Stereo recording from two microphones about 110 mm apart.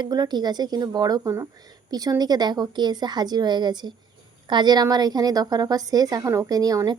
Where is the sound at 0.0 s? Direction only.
40° right (ahead or behind).